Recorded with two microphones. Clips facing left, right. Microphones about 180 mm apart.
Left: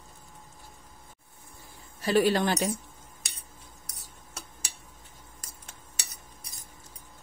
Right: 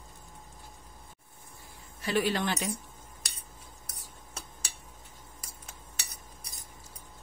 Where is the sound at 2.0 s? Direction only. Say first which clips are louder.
Left 5 dB; 40° left (ahead or behind).